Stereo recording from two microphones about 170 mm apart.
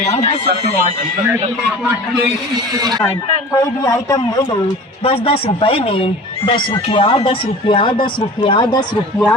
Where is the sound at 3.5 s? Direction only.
20° left (ahead or behind).